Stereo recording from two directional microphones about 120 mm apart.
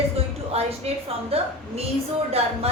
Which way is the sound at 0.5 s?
55° right (ahead or behind).